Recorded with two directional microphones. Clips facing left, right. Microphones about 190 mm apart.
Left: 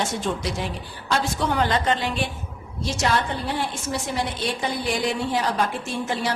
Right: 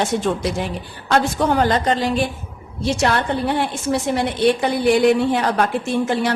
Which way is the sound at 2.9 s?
60° right (ahead or behind).